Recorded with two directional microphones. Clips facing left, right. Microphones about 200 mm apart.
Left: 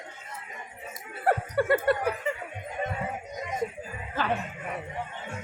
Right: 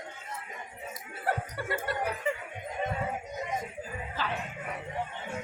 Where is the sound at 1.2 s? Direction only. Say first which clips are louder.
Left 8 dB; 60° left (ahead or behind).